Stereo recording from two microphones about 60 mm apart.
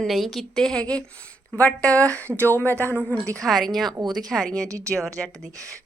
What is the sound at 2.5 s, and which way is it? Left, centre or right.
Speech, left.